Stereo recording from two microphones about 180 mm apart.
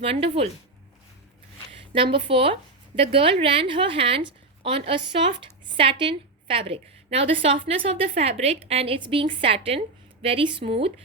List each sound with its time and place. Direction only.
0.0 s a woman's voice: 30° right (ahead or behind)
2.0 s a woman's voice: 30° right (ahead or behind)